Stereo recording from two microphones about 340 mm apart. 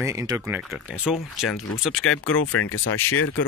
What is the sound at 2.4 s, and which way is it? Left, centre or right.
Speech, left.